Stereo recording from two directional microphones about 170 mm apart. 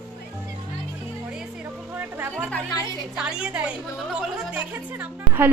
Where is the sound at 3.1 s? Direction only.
5° right (ahead or behind).